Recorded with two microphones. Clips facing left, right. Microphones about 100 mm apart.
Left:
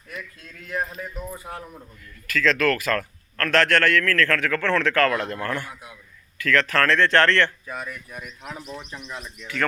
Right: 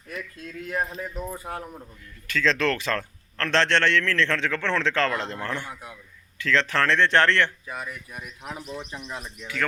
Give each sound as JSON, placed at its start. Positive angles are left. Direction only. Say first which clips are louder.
{"t": 0.9, "sound": "a man's voice", "louder": "right 1 dB", "side_deg": -25}
{"t": 7.7, "sound": "speech", "louder": "left 1 dB", "side_deg": -5}